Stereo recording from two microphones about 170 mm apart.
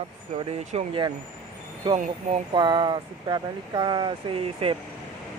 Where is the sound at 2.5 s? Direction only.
25° right (ahead or behind).